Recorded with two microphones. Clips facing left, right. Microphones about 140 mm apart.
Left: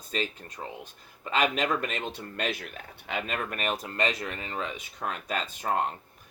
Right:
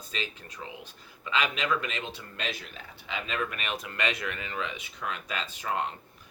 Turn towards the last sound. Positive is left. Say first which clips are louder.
# left 3 dB
turn(degrees=45)  # may be behind; listen again after turning